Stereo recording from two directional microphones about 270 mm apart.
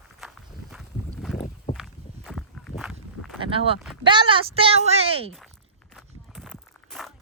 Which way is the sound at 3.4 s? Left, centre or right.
Centre.